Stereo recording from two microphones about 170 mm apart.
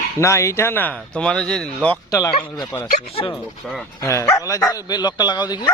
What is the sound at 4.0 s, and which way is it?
Speech, 15° left (ahead or behind).